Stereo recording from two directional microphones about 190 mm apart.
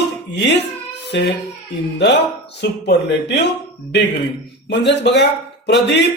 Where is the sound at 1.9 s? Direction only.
65° left (ahead or behind).